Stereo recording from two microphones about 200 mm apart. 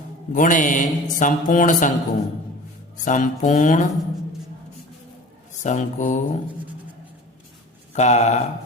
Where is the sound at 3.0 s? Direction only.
40° left (ahead or behind).